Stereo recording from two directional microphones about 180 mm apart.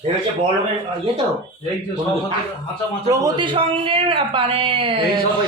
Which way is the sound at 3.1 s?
25° right (ahead or behind).